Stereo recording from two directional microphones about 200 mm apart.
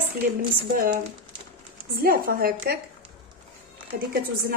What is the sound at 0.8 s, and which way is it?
A woman's voice, 45° right (ahead or behind).